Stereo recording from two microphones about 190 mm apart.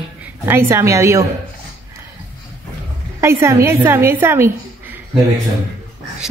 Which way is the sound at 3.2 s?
15° right (ahead or behind).